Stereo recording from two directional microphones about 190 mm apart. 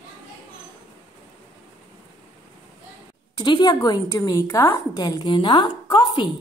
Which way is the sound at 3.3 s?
25° left (ahead or behind).